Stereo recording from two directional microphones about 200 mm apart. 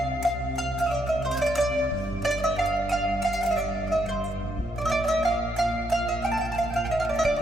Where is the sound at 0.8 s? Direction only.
Centre (ahead or behind).